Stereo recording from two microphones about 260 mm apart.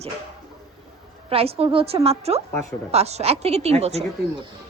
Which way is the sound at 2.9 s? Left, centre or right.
Right.